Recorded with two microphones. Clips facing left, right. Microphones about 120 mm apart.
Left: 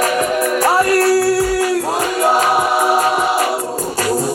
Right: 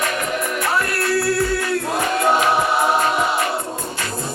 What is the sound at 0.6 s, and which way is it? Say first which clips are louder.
Music: left 10 dB; 35° left (ahead or behind).